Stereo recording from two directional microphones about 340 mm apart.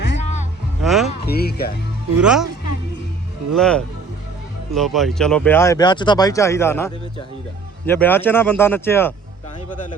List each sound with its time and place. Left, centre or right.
0.2 s music: centre
0.8 s music: centre
1.2 s speech: left
2.1 s speech: centre
3.5 s speech: centre